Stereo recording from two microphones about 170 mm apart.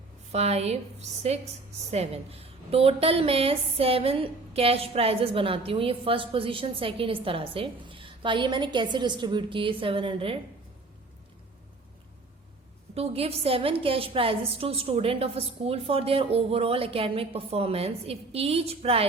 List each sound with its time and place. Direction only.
0.3 s a woman's voice: 40° right (ahead or behind)
12.9 s a woman's voice: 35° right (ahead or behind)